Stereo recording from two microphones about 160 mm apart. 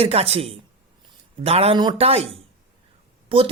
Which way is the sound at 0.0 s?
40° right (ahead or behind).